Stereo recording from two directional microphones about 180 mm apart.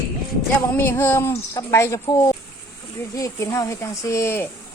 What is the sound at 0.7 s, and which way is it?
A woman's voice, 10° left (ahead or behind).